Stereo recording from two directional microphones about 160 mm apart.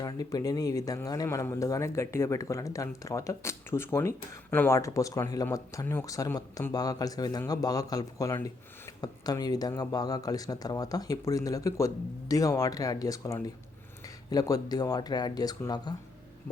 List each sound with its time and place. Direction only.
0.0 s speech: 25° left (ahead or behind)